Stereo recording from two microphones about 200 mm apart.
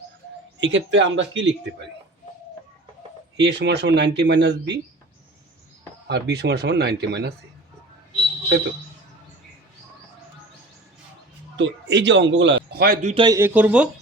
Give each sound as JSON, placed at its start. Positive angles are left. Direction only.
{"t": 0.6, "sound": "a man's voice", "side_deg": -65}
{"t": 3.3, "sound": "speech", "side_deg": -55}
{"t": 6.1, "sound": "speech", "side_deg": -55}
{"t": 11.5, "sound": "a man's voice", "side_deg": -65}
{"t": 13.1, "sound": "a man's voice", "side_deg": -20}